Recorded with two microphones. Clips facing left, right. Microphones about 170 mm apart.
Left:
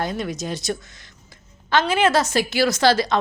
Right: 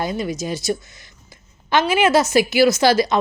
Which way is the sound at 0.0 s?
5° right (ahead or behind).